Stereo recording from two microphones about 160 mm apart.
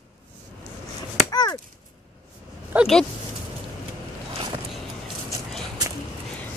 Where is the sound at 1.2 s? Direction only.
25° left (ahead or behind).